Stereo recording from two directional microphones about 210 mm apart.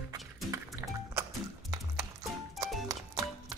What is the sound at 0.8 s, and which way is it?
Music, 10° right (ahead or behind).